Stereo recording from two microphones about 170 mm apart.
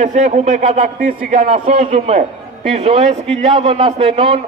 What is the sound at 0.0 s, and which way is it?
A man's voice, 45° right (ahead or behind).